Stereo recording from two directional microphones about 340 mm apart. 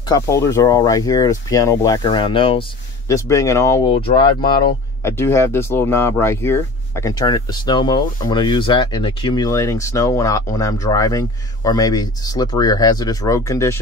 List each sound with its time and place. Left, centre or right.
0.1 s speech: centre